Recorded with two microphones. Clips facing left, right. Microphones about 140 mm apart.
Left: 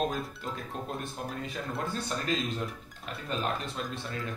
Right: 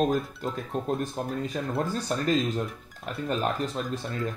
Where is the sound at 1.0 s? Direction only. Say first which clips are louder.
Right 7 dB; 45° right (ahead or behind).